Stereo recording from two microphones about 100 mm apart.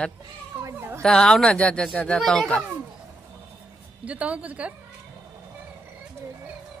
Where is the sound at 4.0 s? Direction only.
15° right (ahead or behind).